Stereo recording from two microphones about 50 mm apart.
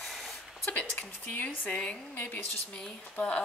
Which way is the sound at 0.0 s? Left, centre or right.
Centre.